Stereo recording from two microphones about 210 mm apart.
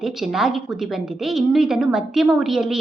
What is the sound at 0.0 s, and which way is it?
A woman's voice, centre (ahead or behind).